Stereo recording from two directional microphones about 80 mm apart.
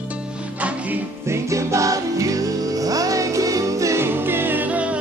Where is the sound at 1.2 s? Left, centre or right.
Right.